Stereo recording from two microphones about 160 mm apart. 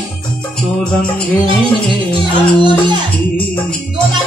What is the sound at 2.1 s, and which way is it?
Music, 30° right (ahead or behind).